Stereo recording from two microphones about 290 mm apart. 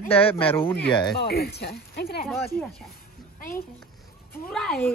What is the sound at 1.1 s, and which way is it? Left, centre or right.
Speech, left.